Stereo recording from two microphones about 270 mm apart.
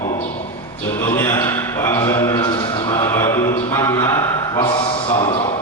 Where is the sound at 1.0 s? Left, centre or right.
Centre.